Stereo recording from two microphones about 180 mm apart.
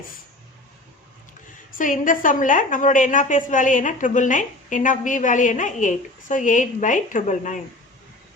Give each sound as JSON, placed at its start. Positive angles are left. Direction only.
{"t": 1.8, "sound": "a woman's voice", "side_deg": 45}